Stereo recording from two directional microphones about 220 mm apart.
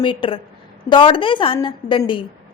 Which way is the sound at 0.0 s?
25° left (ahead or behind).